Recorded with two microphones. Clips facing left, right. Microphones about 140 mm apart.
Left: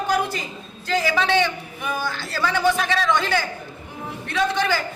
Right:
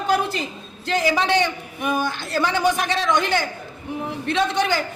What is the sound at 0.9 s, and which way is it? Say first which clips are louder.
A man's voice: right 1 dB; 20° right (ahead or behind).